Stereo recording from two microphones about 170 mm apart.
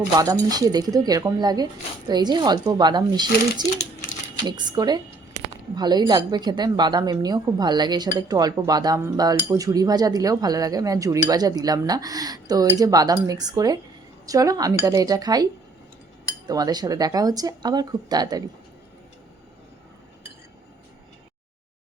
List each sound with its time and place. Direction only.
0.2 s a woman's voice: 20° right (ahead or behind)
16.5 s a woman's voice: 25° right (ahead or behind)